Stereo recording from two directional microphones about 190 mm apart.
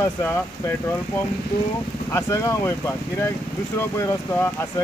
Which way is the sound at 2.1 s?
15° left (ahead or behind).